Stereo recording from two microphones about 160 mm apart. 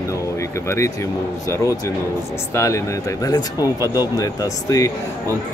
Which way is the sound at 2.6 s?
20° left (ahead or behind).